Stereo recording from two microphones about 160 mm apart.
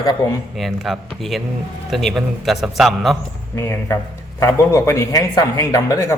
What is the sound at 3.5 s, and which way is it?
A man's voice, 15° left (ahead or behind).